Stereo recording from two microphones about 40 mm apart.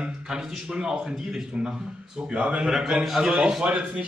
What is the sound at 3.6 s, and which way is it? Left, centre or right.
Speech, right.